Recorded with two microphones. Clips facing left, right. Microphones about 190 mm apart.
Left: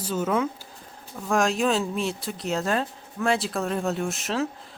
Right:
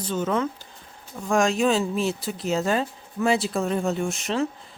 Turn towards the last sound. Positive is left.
turn(degrees=0)  # may be behind; listen again after turning